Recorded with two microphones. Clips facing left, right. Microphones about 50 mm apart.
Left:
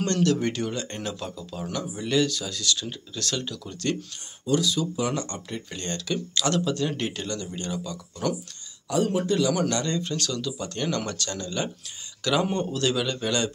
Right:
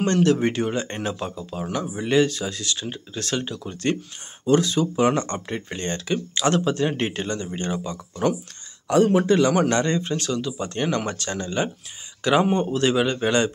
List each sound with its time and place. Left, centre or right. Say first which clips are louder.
0.0 s speech: right 4 dB; right
4.5 s speech: right 5 dB; right
8.8 s speech: right 7 dB; right